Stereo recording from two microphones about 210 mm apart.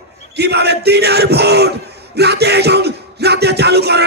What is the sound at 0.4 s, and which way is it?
Speech, 50° right (ahead or behind).